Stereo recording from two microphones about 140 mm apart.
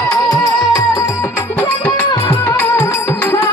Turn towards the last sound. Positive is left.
turn(degrees=15)  # may be behind; listen again after turning